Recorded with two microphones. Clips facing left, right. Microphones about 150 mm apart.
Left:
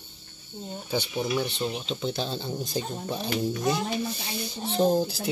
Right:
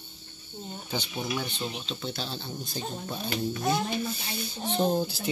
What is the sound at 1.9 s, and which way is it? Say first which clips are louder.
Speech: left 5 dB; 20° left (ahead or behind).